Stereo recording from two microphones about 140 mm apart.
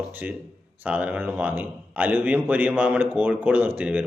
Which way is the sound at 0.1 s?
15° right (ahead or behind).